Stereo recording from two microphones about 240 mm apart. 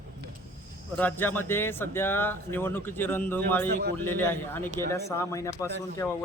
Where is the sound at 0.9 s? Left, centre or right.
Centre.